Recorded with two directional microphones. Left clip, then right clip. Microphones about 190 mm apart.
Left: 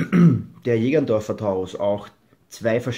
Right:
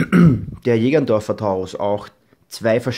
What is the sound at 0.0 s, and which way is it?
Speech, 35° right (ahead or behind).